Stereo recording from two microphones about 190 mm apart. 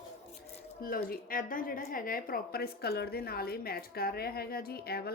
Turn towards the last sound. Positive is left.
turn(degrees=55)  # may be behind; listen again after turning